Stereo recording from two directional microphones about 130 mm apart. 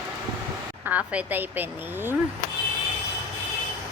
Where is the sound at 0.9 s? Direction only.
10° right (ahead or behind).